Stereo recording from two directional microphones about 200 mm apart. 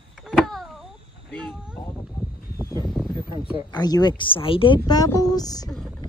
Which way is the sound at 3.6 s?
20° left (ahead or behind).